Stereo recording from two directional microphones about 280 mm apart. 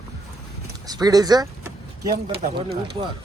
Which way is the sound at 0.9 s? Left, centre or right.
Centre.